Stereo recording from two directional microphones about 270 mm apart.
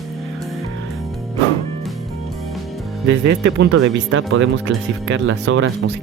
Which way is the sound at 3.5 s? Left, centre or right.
Right.